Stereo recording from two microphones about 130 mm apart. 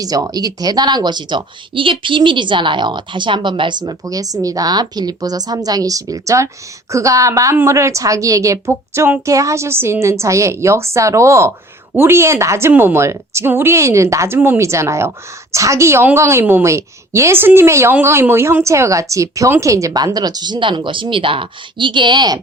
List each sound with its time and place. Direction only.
0.0 s a woman's voice: 30° right (ahead or behind)